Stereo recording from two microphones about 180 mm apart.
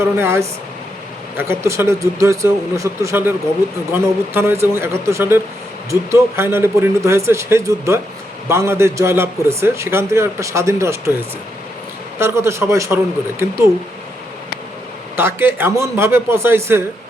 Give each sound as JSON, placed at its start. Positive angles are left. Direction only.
{"t": 0.0, "sound": "a man's voice", "side_deg": -15}
{"t": 15.1, "sound": "a man's voice", "side_deg": -10}